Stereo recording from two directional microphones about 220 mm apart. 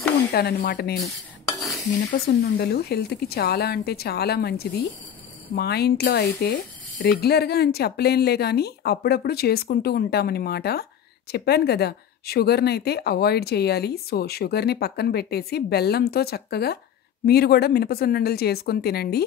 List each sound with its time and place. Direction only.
0.3 s speech: 45° left (ahead or behind)
2.1 s speech: 45° left (ahead or behind)